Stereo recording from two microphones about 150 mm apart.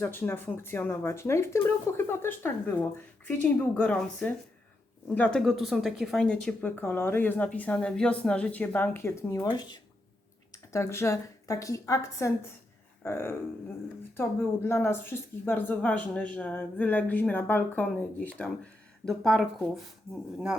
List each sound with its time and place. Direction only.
0.0 s a woman's voice: 15° left (ahead or behind)